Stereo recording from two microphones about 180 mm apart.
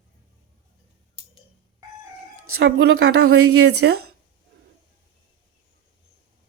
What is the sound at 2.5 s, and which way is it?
A woman's voice, 65° right (ahead or behind).